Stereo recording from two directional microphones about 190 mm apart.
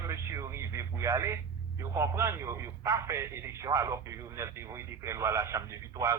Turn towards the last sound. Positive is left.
turn(degrees=-15)  # may be behind; listen again after turning